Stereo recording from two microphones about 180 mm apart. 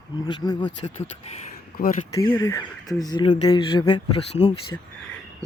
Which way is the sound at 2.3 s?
15° left (ahead or behind).